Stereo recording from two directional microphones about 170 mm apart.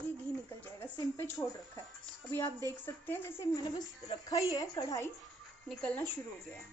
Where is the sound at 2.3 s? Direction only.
10° left (ahead or behind).